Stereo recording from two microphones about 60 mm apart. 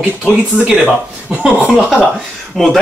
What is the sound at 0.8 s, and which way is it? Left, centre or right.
Speech, centre.